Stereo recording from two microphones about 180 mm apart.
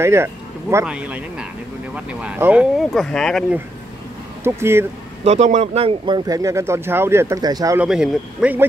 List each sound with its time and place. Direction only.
0.0 s speech: 15° right (ahead or behind); by 3.5 s centre (ahead or behind)
4.4 s speech: 15° right (ahead or behind)
5.2 s speech: 40° right (ahead or behind); by 7.8 s 20° right (ahead or behind)
7.8 s speech: 5° right (ahead or behind)